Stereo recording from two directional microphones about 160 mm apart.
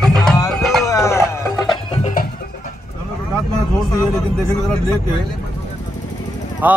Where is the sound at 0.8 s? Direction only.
20° left (ahead or behind).